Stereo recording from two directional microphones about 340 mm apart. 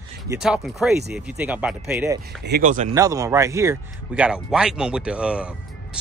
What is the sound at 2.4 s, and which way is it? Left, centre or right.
Speech, right.